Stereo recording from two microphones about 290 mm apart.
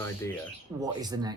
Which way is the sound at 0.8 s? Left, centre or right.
Centre.